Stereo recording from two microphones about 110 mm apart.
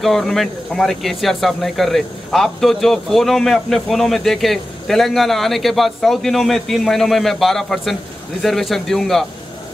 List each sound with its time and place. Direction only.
0.0 s speech: centre (ahead or behind)